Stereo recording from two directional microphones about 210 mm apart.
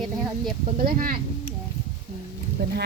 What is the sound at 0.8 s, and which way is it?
Speech, 45° right (ahead or behind).